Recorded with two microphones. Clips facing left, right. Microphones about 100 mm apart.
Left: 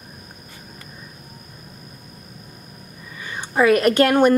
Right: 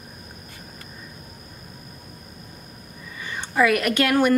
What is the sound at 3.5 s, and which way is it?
Speech, 30° left (ahead or behind).